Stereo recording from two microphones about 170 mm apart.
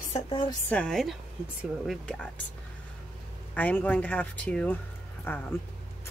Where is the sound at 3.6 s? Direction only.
10° left (ahead or behind).